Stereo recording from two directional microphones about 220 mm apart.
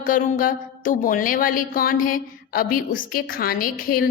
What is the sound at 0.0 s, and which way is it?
A woman's voice, 40° left (ahead or behind).